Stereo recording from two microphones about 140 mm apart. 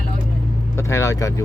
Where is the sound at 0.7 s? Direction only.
20° left (ahead or behind).